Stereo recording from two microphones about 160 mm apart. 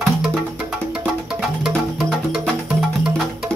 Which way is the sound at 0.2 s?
5° right (ahead or behind).